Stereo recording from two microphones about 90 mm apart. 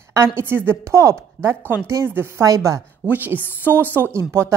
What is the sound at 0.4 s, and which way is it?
Speech, 25° right (ahead or behind).